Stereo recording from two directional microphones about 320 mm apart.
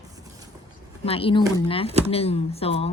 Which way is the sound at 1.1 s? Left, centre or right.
Centre.